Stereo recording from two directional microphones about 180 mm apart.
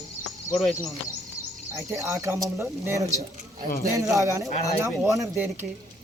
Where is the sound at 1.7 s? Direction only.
15° right (ahead or behind).